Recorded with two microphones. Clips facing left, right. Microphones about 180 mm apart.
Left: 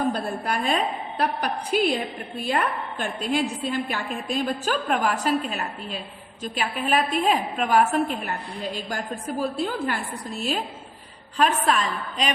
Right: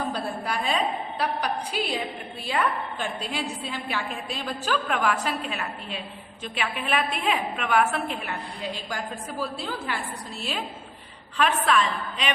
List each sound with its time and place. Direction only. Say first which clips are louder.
0.1 s a woman's voice: left 3 dB; 50° left (ahead or behind)